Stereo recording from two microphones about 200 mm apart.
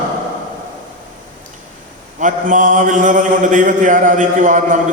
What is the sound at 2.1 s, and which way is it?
A man's voice, 40° right (ahead or behind).